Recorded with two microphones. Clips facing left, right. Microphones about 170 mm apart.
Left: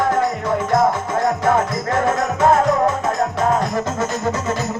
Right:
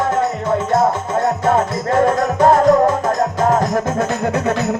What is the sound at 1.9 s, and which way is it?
Music, 35° right (ahead or behind).